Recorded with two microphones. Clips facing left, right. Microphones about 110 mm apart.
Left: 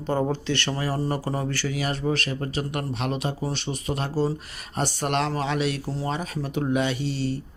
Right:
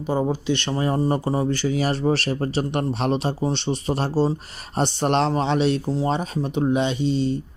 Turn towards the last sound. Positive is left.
turn(degrees=-20)  # may be behind; listen again after turning